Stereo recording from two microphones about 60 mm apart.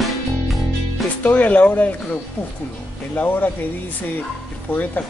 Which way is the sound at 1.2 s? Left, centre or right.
Left.